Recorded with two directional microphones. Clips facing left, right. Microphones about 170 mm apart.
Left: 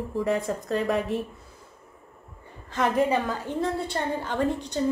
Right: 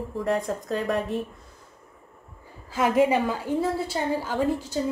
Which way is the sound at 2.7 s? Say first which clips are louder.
Right 2 dB; 5° right (ahead or behind).